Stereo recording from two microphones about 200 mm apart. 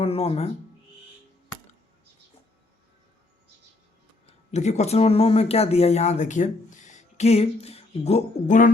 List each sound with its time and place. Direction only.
0.0 s speech: 30° left (ahead or behind)
4.3 s speech: 35° left (ahead or behind)